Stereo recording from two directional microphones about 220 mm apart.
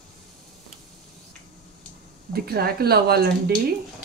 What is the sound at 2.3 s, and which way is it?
Speech, 45° right (ahead or behind).